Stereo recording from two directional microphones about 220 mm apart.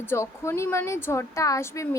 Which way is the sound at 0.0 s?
10° left (ahead or behind).